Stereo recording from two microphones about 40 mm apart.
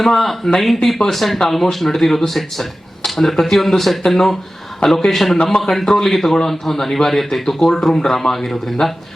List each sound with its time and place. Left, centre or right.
0.0 s a man's voice: centre